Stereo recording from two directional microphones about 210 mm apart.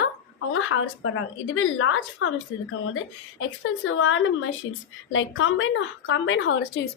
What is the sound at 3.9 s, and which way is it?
Speech, 70° left (ahead or behind).